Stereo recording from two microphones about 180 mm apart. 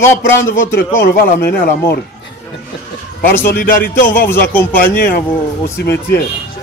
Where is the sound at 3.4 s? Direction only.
55° left (ahead or behind).